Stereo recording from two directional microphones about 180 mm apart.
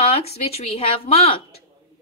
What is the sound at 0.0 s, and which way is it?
A woman's voice, 35° left (ahead or behind).